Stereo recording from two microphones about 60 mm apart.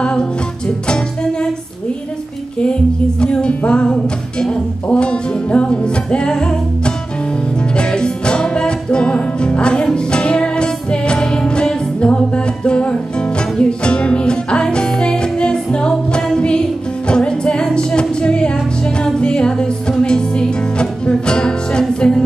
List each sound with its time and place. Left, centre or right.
0.0 s music: centre
3.2 s music: centre